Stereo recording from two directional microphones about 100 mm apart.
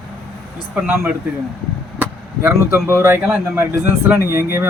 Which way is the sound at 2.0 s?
15° right (ahead or behind).